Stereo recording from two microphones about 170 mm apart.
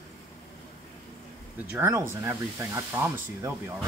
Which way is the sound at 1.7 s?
15° right (ahead or behind).